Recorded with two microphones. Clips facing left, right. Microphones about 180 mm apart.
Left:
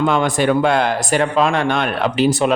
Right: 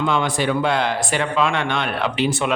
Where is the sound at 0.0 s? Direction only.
50° left (ahead or behind).